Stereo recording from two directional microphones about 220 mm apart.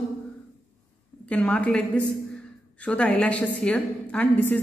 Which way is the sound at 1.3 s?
5° left (ahead or behind).